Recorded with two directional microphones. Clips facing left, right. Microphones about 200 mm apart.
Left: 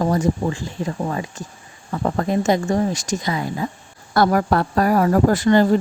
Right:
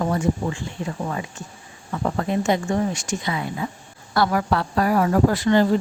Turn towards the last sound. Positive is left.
turn(degrees=45)  # may be behind; listen again after turning